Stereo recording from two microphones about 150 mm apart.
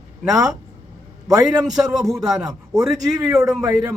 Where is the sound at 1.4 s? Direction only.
5° right (ahead or behind).